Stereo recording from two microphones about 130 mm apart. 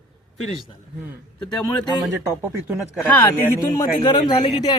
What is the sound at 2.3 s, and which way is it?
Speech, 10° right (ahead or behind).